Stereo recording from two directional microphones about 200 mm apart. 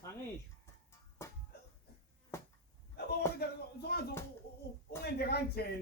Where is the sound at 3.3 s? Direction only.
55° left (ahead or behind).